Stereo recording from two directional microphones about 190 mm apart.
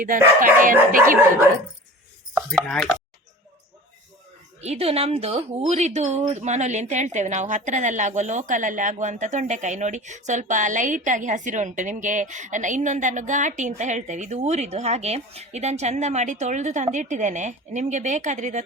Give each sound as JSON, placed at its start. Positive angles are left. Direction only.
{"t": 0.6, "sound": "dog", "side_deg": -45}
{"t": 2.5, "sound": "speech", "side_deg": 5}
{"t": 4.6, "sound": "speech", "side_deg": -35}